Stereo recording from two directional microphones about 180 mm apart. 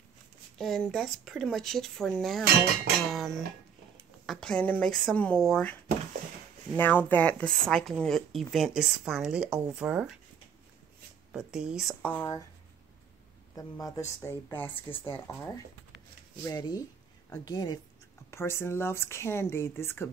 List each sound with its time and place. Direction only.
0.6 s speech: centre (ahead or behind)
11.3 s speech: 5° right (ahead or behind); by 12.4 s 15° left (ahead or behind)
13.6 s speech: 20° left (ahead or behind)